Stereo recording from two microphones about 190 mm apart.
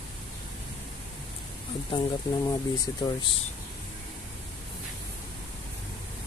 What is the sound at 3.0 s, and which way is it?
Speech, 25° left (ahead or behind).